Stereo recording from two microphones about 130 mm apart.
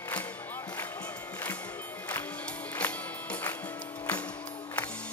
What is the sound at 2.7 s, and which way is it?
Music, 10° left (ahead or behind).